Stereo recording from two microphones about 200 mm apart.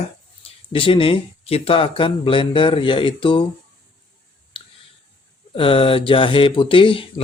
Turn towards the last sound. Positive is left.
turn(degrees=25)  # may be behind; listen again after turning